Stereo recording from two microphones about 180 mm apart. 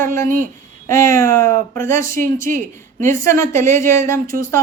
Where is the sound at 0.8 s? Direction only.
15° left (ahead or behind).